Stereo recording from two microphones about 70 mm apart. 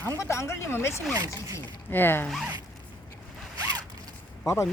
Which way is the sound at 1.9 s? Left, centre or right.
Left.